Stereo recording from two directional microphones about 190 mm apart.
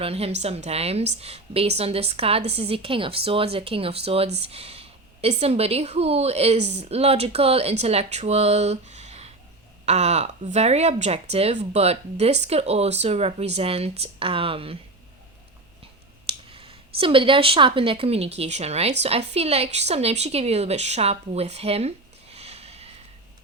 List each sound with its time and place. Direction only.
0.0 s a woman's voice: 30° right (ahead or behind)
16.2 s speech: 30° right (ahead or behind)